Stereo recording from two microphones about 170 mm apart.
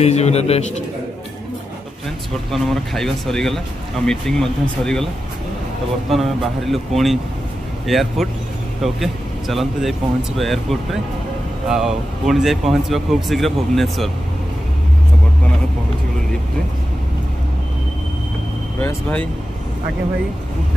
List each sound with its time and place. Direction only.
0.0 s speech: 40° left (ahead or behind)
2.5 s speech: centre (ahead or behind)
6.0 s speech: centre (ahead or behind)
18.8 s speech: 10° left (ahead or behind)